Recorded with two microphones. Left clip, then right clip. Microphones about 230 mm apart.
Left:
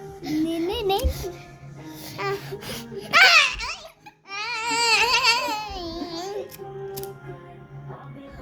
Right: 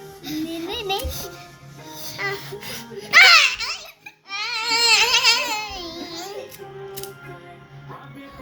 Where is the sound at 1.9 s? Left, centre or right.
Centre.